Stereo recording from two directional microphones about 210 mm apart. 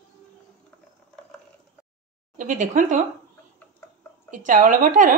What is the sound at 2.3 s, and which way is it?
Speech, 40° right (ahead or behind).